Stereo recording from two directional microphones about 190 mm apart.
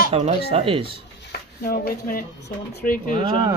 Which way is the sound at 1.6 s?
50° left (ahead or behind).